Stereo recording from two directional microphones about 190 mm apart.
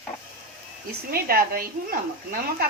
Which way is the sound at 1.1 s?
50° right (ahead or behind).